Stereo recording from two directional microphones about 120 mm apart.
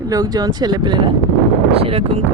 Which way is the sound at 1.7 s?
55° right (ahead or behind).